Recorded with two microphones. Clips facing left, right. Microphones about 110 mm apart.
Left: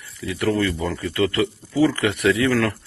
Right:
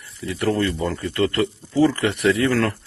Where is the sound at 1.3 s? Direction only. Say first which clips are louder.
Right 1 dB; centre (ahead or behind).